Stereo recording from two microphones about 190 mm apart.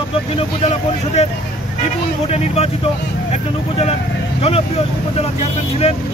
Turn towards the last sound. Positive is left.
turn(degrees=30)  # may be behind; listen again after turning